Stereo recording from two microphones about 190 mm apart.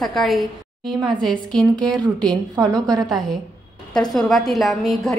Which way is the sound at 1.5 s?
5° left (ahead or behind).